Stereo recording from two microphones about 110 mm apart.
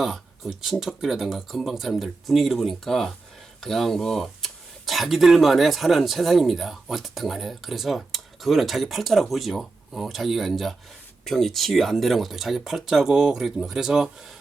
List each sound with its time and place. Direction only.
0.0 s speech: centre (ahead or behind)